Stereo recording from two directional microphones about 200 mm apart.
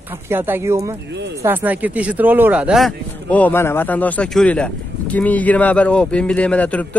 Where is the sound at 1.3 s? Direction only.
10° right (ahead or behind).